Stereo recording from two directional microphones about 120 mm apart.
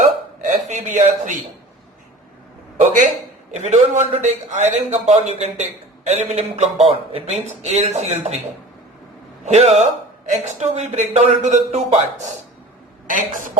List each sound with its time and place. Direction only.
0.0 s hiccup: 90° right
2.7 s speech: 85° right
3.5 s a man's voice: 75° right (ahead or behind)
6.1 s a man's voice: 75° right (ahead or behind)
9.4 s a man's voice: 75° right (ahead or behind)
13.1 s speech: 90° right